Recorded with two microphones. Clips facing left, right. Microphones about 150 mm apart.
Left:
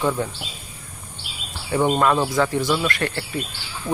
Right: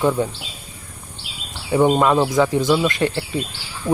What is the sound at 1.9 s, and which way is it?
Speech, 10° right (ahead or behind).